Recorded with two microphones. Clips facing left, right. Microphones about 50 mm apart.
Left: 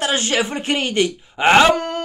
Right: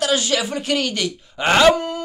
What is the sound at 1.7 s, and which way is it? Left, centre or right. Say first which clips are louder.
Speech: left 2 dB; left.